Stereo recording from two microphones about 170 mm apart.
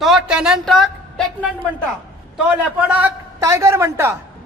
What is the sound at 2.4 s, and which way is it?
A man's voice, 10° right (ahead or behind).